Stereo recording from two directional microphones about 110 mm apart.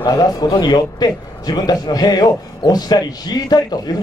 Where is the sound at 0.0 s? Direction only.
40° left (ahead or behind).